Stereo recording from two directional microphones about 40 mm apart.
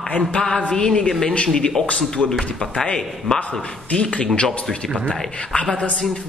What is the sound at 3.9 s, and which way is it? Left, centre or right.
Speech, left.